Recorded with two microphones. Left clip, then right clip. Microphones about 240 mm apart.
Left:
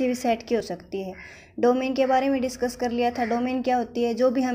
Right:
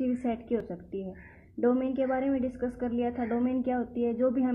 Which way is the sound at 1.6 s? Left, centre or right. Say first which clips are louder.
Left 6 dB; left.